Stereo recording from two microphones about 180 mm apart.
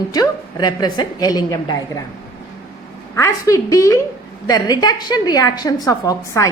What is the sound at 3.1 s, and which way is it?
A woman's voice, 15° left (ahead or behind).